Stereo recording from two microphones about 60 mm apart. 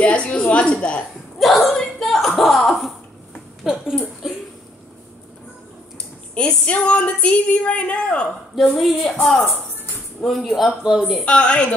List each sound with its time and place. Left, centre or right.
0.0 s a woman's voice: left
1.4 s a woman's voice: centre
1.7 s a sound: centre
3.6 s speech: centre
4.2 s a sound: centre
6.3 s a woman's voice: centre
8.5 s a woman's voice: centre
10.2 s a woman's voice: centre
10.8 s speech: centre
11.2 s a woman's voice: centre